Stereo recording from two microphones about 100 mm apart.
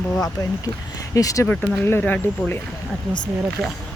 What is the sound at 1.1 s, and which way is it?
Speech, 35° left (ahead or behind).